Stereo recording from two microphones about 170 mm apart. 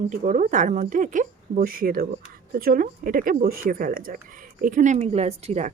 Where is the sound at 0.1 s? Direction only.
50° right (ahead or behind).